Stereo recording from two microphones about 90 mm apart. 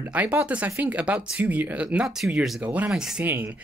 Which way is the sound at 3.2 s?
25° right (ahead or behind).